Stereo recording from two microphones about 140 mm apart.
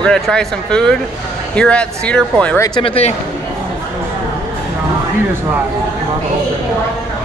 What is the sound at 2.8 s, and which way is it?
Speech, 45° left (ahead or behind).